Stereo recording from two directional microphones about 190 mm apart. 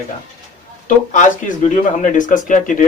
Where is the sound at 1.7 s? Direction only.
40° left (ahead or behind).